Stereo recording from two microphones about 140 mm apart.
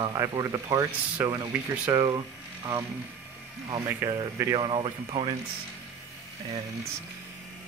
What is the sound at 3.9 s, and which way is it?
Speech, 20° right (ahead or behind).